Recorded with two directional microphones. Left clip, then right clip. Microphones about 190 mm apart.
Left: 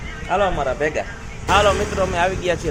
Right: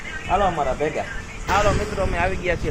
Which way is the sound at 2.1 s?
20° left (ahead or behind).